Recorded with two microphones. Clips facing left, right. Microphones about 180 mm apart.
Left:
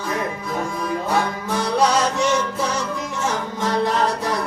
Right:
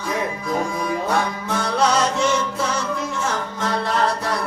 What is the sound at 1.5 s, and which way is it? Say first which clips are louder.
Music: left 1 dB; 15° left (ahead or behind).